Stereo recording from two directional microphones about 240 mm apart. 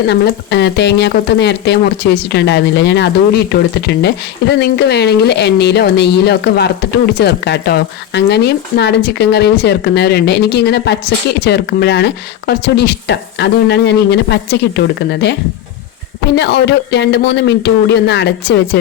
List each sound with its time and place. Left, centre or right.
0.1 s speech: left